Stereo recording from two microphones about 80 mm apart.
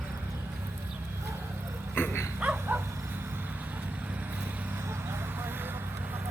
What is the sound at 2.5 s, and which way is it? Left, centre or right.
Dog, right.